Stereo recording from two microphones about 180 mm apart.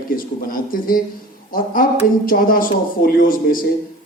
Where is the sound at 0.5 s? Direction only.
50° left (ahead or behind).